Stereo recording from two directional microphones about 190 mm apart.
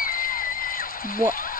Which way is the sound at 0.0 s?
50° left (ahead or behind).